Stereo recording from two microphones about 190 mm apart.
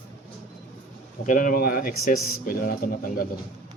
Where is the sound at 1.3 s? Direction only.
45° left (ahead or behind).